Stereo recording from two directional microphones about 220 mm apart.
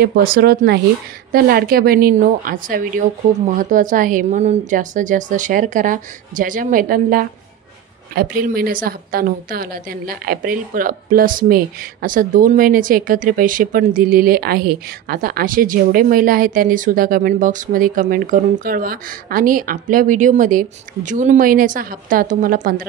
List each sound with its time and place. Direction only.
0.0 s a woman's voice: 45° right (ahead or behind)